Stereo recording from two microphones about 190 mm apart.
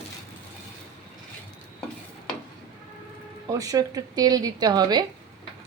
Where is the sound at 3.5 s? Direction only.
20° right (ahead or behind).